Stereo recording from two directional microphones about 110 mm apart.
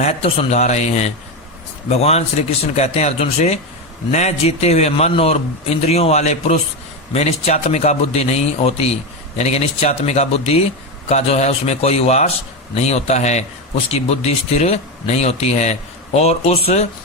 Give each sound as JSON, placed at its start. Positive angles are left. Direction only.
{"t": 0.0, "sound": "a man's voice", "side_deg": 75}
{"t": 1.9, "sound": "speech", "side_deg": 75}
{"t": 9.4, "sound": "speech", "side_deg": 85}
{"t": 11.1, "sound": "speech", "side_deg": 85}
{"t": 13.9, "sound": "speech", "side_deg": 75}